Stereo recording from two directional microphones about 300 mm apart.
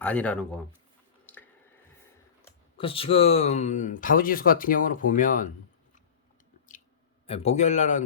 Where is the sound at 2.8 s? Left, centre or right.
Centre.